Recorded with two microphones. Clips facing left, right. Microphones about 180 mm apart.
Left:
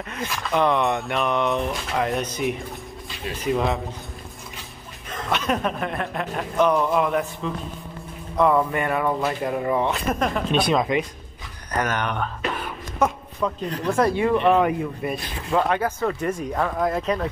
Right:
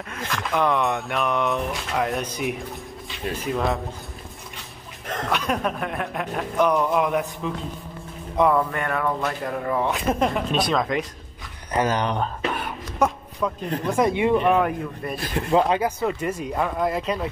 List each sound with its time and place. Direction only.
0.1 s speech: 5° left (ahead or behind)
5.3 s speech: 5° right (ahead or behind)
8.5 s speech: centre (ahead or behind)
9.8 s speech: 10° right (ahead or behind)
10.1 s speech: 20° right (ahead or behind)
10.5 s speech: centre (ahead or behind)
11.7 s speech: 30° right (ahead or behind)
13.4 s speech: centre (ahead or behind)
13.7 s speech: 20° right (ahead or behind)
14.6 s speech: 5° left (ahead or behind)
15.5 s speech: 15° right (ahead or behind)